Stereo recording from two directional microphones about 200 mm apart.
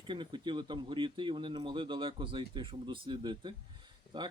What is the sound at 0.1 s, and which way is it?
Speech, 25° right (ahead or behind).